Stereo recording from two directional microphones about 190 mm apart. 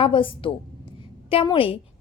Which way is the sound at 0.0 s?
25° left (ahead or behind).